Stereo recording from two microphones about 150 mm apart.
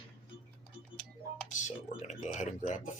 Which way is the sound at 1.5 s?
55° left (ahead or behind).